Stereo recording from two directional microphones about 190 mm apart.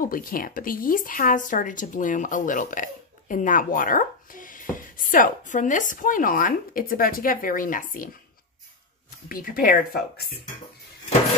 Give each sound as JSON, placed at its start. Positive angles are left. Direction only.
{"t": 0.0, "sound": "speech", "side_deg": 50}
{"t": 9.3, "sound": "speech", "side_deg": 50}